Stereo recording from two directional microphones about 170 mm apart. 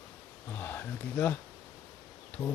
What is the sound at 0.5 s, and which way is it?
Speech, 10° left (ahead or behind).